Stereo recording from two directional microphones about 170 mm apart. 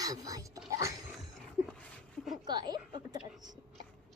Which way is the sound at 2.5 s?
25° right (ahead or behind).